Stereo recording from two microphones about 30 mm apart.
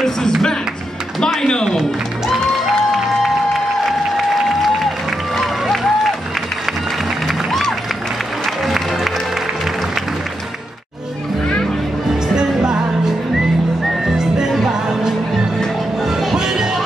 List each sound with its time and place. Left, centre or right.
0.0 s music: centre
1.4 s a sound: left
5.4 s music: centre
7.2 s music: centre
8.5 s music: centre
12.4 s music: right
14.1 s music: right; by 16.3 s centre
16.3 s music: centre